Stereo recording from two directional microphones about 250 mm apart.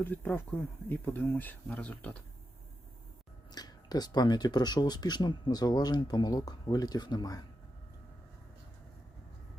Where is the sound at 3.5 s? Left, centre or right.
Centre.